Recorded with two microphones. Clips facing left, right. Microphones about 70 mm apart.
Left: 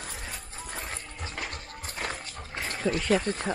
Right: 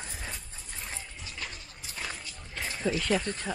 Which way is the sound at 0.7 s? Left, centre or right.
Left.